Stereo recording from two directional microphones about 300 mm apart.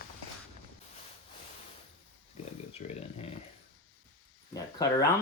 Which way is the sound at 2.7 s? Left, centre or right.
Left.